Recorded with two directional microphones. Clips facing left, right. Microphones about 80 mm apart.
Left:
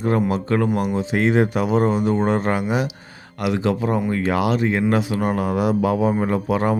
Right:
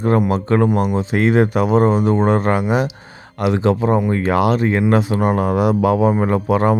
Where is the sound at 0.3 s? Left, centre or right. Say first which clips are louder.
Right 4 dB; right.